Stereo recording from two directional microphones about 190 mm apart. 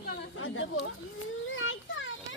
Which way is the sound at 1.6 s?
90° left.